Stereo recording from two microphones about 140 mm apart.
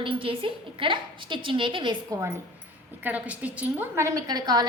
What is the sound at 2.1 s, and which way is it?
A woman's voice, 20° right (ahead or behind).